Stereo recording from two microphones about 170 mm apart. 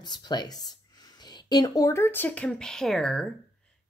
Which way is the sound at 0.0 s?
25° left (ahead or behind).